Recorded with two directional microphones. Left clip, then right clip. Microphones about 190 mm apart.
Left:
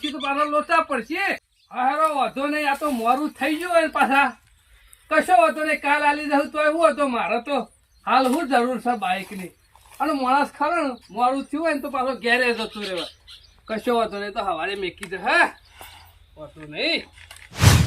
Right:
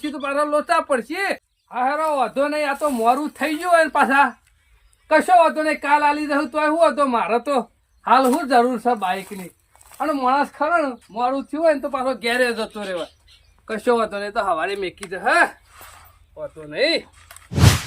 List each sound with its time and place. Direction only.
0.0 s speech: 10° right (ahead or behind)